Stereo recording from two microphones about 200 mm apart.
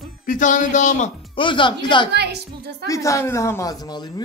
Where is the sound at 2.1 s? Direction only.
55° right (ahead or behind).